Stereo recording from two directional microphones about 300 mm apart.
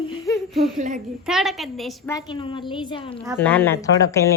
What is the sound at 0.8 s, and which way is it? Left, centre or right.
Speech, right.